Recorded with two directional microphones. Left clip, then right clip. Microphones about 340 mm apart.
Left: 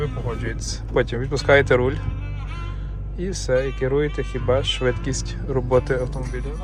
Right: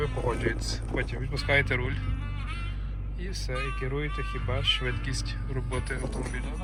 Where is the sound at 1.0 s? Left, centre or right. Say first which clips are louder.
Left 15 dB; left.